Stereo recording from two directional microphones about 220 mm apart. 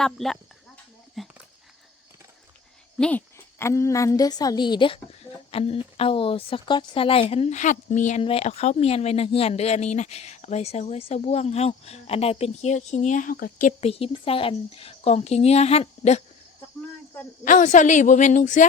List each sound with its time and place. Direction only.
0.0 s speech: centre (ahead or behind)
3.0 s speech: 5° left (ahead or behind); by 16.2 s 30° left (ahead or behind)
17.4 s a woman's voice: 35° left (ahead or behind)